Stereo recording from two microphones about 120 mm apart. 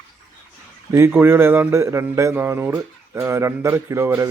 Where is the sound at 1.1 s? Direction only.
15° right (ahead or behind).